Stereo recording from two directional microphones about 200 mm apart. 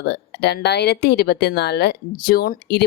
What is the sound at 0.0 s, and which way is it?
Speech, 55° left (ahead or behind).